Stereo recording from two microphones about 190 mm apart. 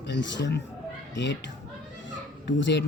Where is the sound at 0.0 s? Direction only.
70° left (ahead or behind).